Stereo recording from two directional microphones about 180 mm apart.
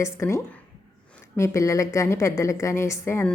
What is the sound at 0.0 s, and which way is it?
A woman's voice, 15° left (ahead or behind).